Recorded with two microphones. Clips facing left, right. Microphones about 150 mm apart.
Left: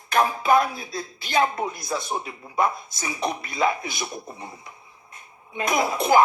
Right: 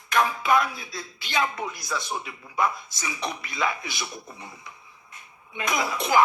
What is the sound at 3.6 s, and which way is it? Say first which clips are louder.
Speech: left 5 dB; 35° left (ahead or behind).